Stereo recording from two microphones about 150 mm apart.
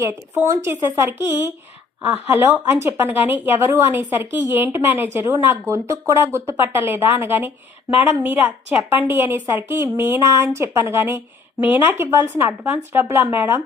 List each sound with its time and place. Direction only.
0.0 s a woman's voice: 20° right (ahead or behind)